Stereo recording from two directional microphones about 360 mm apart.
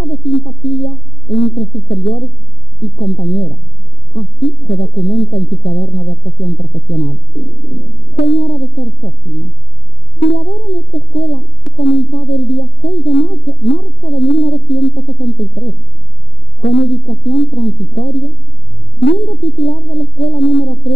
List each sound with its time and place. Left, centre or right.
0.0 s a sound: left
0.7 s speech: left
16.8 s speech: left